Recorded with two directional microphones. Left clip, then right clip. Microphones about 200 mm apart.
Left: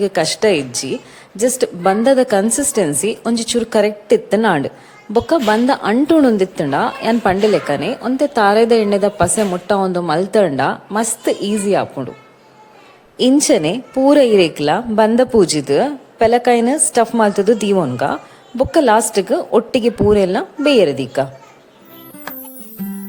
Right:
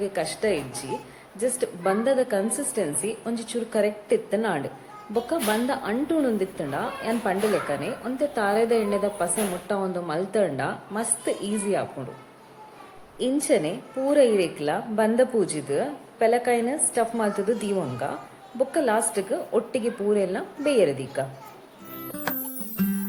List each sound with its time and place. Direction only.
0.0 s speech: 50° left (ahead or behind)
13.1 s speech: 50° left (ahead or behind)